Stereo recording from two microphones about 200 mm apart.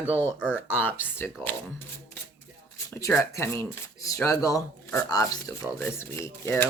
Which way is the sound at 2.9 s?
15° left (ahead or behind).